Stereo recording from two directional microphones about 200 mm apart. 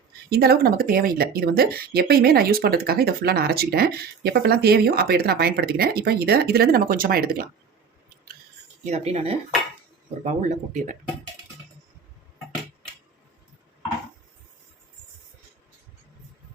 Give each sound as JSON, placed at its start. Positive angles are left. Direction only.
{"t": 0.3, "sound": "speech", "side_deg": -50}
{"t": 8.8, "sound": "speech", "side_deg": -30}
{"t": 10.5, "sound": "speech", "side_deg": -40}